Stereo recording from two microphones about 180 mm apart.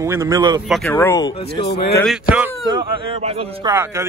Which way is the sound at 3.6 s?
15° right (ahead or behind).